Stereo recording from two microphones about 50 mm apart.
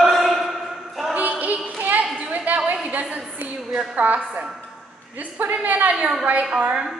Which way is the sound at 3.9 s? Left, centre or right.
Right.